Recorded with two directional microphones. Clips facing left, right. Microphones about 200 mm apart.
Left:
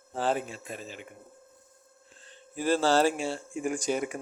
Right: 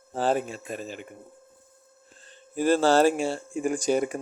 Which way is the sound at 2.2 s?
45° right (ahead or behind).